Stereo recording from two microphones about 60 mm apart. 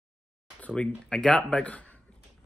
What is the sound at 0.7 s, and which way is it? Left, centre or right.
Speech, centre.